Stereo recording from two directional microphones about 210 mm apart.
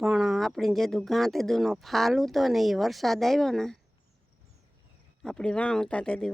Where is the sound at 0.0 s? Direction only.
Centre (ahead or behind).